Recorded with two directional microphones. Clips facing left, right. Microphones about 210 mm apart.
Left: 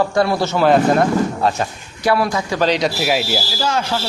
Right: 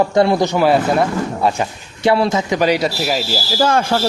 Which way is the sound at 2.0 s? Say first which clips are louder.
Right 3 dB; 25° right (ahead or behind).